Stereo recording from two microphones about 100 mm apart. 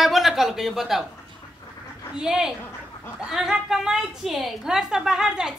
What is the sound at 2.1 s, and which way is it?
A woman's voice, 5° right (ahead or behind).